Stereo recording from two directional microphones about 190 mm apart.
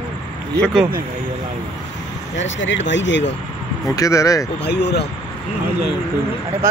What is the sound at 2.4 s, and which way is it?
Speech, 75° left (ahead or behind).